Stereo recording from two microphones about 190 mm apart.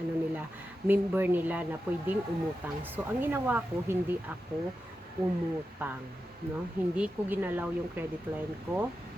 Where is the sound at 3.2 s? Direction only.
10° right (ahead or behind).